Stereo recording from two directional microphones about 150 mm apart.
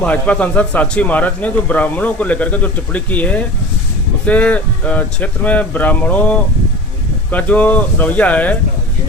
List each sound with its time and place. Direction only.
0.0 s a man's voice: 10° left (ahead or behind)